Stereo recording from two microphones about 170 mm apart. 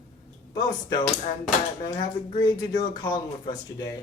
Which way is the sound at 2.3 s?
25° left (ahead or behind).